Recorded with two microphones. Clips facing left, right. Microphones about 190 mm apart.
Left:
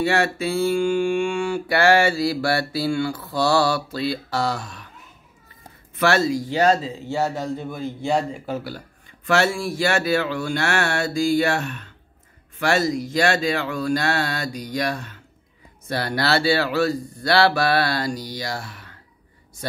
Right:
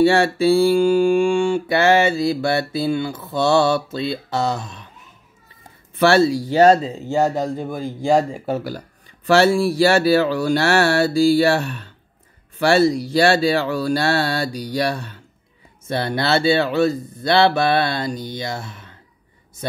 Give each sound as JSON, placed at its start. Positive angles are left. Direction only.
{"t": 0.0, "sound": "mantra", "side_deg": -30}
{"t": 5.9, "sound": "speech", "side_deg": -30}
{"t": 15.9, "sound": "mantra", "side_deg": -25}